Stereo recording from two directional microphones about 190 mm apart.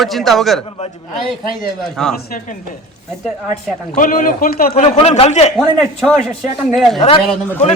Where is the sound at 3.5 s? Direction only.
40° left (ahead or behind).